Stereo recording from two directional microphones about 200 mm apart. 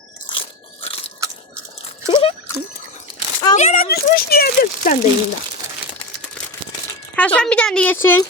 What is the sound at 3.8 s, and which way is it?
Speech, 50° left (ahead or behind).